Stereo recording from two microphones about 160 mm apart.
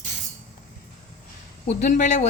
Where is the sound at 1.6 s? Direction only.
55° left (ahead or behind).